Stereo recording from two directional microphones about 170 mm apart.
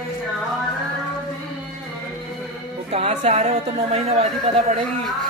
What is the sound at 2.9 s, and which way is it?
A woman's voice, 40° right (ahead or behind).